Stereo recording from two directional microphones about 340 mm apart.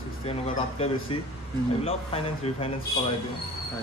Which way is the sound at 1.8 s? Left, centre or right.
Centre.